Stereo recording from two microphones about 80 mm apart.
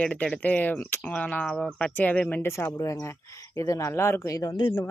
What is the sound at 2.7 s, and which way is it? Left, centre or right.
Speech, left.